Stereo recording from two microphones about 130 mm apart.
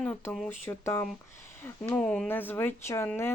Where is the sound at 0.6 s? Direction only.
20° left (ahead or behind).